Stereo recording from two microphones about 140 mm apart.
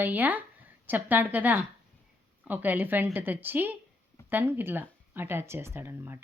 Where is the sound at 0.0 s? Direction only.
10° right (ahead or behind).